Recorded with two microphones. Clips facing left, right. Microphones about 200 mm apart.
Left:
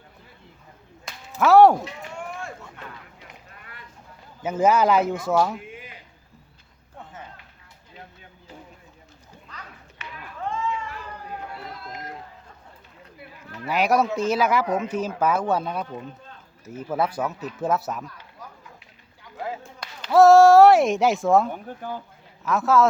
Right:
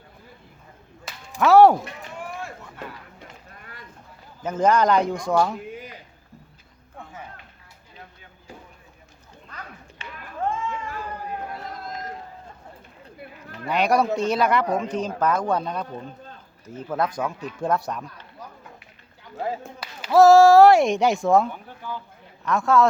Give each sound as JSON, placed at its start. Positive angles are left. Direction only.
{"t": 1.4, "sound": "a woman's voice", "side_deg": 0}
{"t": 4.4, "sound": "a woman's voice", "side_deg": 5}
{"t": 9.5, "sound": "a sound", "side_deg": -55}
{"t": 10.0, "sound": "run", "side_deg": -30}
{"t": 10.5, "sound": "run", "side_deg": -50}
{"t": 13.7, "sound": "a woman's voice", "side_deg": 5}
{"t": 19.8, "sound": "a woman's voice", "side_deg": -5}
{"t": 21.5, "sound": "speech", "side_deg": 50}
{"t": 22.4, "sound": "a woman's voice", "side_deg": 5}